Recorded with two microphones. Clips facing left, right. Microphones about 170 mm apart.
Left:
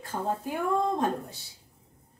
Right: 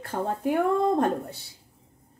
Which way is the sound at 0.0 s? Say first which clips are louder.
Right 4 dB; 65° right (ahead or behind).